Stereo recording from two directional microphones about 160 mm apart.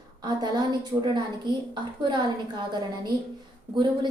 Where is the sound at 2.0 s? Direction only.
30° right (ahead or behind).